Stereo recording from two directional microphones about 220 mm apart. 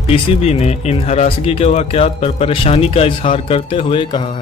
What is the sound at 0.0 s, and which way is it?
Speech, 25° left (ahead or behind).